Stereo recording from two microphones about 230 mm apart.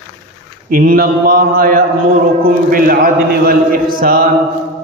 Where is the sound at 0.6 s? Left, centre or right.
Right.